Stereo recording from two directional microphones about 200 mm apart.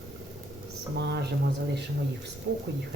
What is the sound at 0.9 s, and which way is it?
Speech, 55° right (ahead or behind).